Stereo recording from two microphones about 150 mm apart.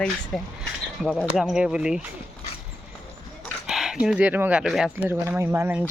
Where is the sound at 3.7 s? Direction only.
5° right (ahead or behind).